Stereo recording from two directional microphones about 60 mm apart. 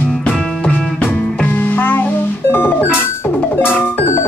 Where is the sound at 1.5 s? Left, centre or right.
Left.